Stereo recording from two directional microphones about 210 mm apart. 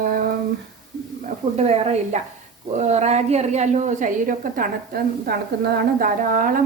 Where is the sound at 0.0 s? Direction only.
40° right (ahead or behind).